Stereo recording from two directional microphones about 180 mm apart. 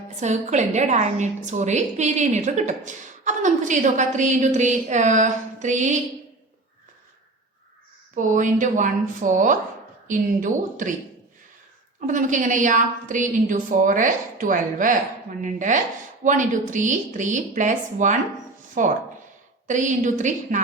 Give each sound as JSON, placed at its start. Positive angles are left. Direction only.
{"t": 0.2, "sound": "a woman's voice", "side_deg": -40}
{"t": 8.1, "sound": "a woman's voice", "side_deg": -45}
{"t": 11.9, "sound": "a woman's voice", "side_deg": -45}